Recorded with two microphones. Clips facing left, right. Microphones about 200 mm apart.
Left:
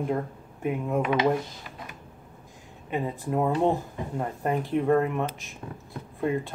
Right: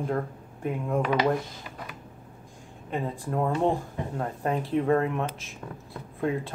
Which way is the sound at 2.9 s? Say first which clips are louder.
Left 2 dB; 5° left (ahead or behind).